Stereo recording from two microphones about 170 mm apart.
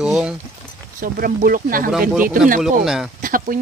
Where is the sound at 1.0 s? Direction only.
55° right (ahead or behind).